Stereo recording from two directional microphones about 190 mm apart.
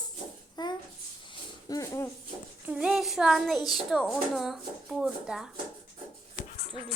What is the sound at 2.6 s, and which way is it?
A woman's voice, 5° right (ahead or behind).